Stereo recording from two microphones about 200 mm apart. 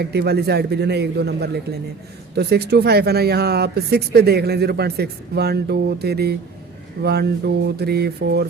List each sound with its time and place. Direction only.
0.0 s a man's voice: 55° right (ahead or behind)